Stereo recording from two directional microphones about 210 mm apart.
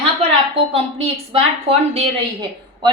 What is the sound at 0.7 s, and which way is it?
A woman's voice, 30° right (ahead or behind).